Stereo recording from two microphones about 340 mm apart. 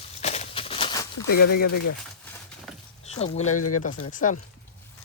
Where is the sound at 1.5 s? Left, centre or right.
Left.